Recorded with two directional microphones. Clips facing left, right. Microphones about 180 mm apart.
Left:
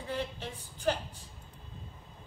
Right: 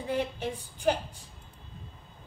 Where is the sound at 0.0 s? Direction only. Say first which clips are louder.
Right 6 dB; 15° right (ahead or behind).